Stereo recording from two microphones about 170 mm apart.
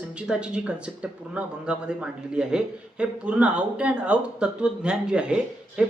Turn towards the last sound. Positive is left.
turn(degrees=-5)  # may be behind; listen again after turning